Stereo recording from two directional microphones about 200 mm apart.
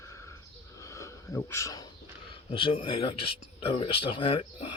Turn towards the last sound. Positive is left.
turn(degrees=25)  # may be behind; listen again after turning